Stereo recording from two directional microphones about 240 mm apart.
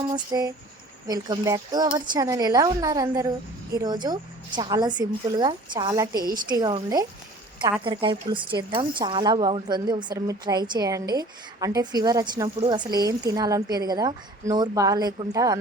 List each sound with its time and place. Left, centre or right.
0.1 s a woman's voice: centre